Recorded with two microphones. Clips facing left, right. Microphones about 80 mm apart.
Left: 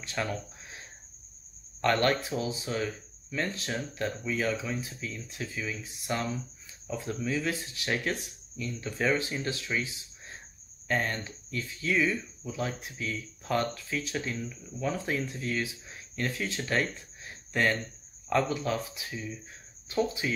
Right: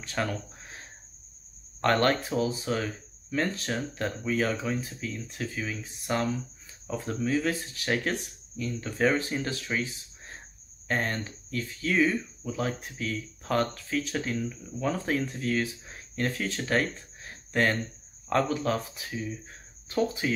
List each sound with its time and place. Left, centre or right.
0.0 s speech: right
1.8 s speech: right
9.8 s a sound: right
10.9 s speech: right